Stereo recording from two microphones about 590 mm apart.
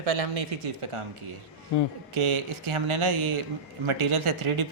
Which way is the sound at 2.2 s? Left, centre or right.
Right.